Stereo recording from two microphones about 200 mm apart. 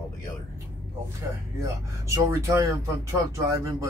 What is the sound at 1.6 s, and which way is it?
Speech, 15° right (ahead or behind).